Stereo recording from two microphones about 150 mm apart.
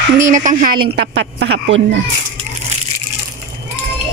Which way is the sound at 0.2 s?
55° right (ahead or behind).